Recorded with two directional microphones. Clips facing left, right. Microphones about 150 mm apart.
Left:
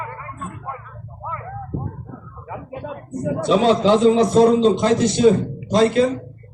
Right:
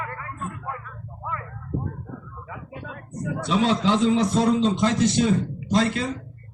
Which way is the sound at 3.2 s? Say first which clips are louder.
Left 7 dB; 30° left (ahead or behind).